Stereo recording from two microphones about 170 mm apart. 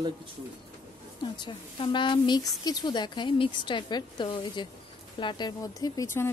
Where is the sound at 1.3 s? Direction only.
25° left (ahead or behind).